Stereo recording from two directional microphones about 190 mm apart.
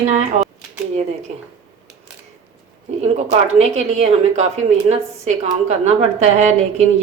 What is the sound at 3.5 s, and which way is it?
Speech, 35° right (ahead or behind).